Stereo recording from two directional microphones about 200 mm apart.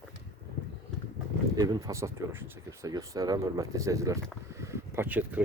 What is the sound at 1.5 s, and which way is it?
Speech, 20° right (ahead or behind).